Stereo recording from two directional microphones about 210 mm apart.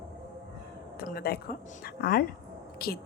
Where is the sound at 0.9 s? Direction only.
45° left (ahead or behind).